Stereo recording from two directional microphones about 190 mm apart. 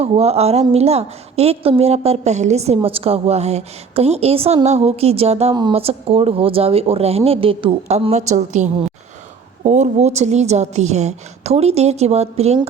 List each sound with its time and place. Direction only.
0.0 s a woman's voice: 35° right (ahead or behind)